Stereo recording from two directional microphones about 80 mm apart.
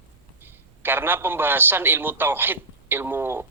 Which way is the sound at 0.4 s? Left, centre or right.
Right.